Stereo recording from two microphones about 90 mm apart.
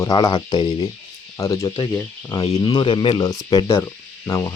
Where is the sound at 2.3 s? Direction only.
50° left (ahead or behind).